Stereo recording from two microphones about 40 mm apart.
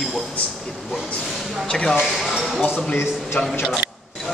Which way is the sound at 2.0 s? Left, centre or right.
Centre.